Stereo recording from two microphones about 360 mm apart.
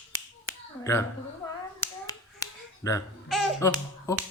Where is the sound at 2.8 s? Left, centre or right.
Centre.